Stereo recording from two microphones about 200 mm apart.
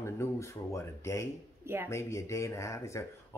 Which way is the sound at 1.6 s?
10° right (ahead or behind).